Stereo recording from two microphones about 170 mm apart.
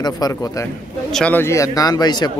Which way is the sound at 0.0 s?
20° left (ahead or behind).